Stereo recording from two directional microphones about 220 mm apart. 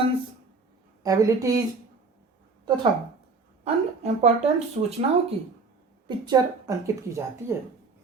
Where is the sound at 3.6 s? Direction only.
30° right (ahead or behind).